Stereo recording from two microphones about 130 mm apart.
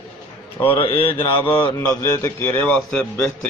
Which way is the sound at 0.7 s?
45° left (ahead or behind).